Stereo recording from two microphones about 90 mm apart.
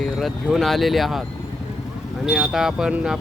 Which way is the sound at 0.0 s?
Centre (ahead or behind).